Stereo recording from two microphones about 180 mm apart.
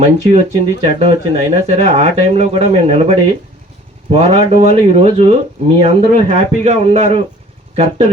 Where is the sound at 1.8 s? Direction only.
35° right (ahead or behind).